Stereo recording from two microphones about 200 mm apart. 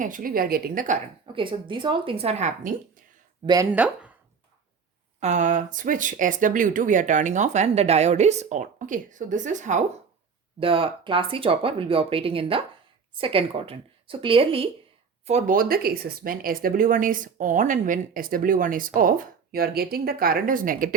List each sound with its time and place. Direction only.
0.0 s speech: 45° right (ahead or behind)
1.4 s speech: 25° right (ahead or behind)
3.4 s speech: 20° right (ahead or behind)
3.7 s speech: 5° right (ahead or behind)
5.2 s speech: 35° right (ahead or behind)
10.6 s speech: 25° right (ahead or behind); by 20.9 s 45° right (ahead or behind)